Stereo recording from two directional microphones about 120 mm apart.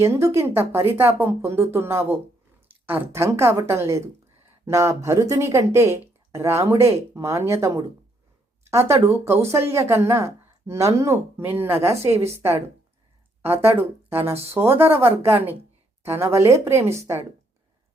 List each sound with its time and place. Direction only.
0.0 s speech: 25° right (ahead or behind)
9.0 s speech: 20° right (ahead or behind)
12.1 s speech: 60° right (ahead or behind)
13.5 s speech: 20° right (ahead or behind)